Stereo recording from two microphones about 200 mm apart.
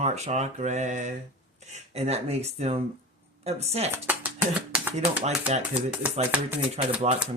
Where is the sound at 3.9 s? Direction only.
10° right (ahead or behind).